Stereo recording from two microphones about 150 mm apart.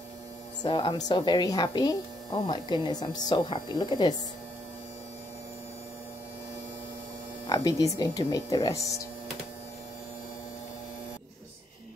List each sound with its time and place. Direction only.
0.6 s a woman's voice: 30° left (ahead or behind)
7.4 s a woman's voice: 25° left (ahead or behind)